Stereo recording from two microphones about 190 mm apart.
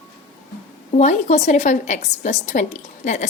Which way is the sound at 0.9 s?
40° left (ahead or behind).